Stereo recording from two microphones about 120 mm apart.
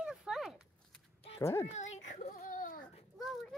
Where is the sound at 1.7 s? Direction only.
75° left (ahead or behind).